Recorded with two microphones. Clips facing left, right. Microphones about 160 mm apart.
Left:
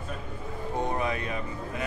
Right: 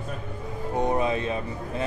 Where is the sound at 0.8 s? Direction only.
20° right (ahead or behind).